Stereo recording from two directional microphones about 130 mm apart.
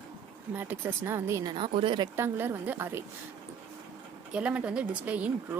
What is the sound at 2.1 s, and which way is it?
Speech, 15° right (ahead or behind).